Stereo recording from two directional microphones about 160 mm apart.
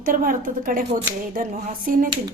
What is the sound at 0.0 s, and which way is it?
Speech, 60° right (ahead or behind).